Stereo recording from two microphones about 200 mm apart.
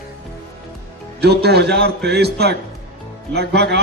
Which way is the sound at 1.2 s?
55° right (ahead or behind).